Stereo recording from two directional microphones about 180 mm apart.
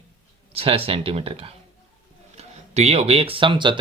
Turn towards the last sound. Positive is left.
turn(degrees=-25)  # may be behind; listen again after turning